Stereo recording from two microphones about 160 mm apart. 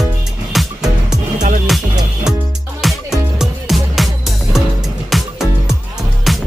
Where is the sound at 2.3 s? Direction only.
5° right (ahead or behind).